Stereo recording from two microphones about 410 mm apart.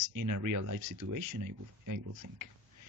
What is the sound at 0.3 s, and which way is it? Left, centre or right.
Speech, right.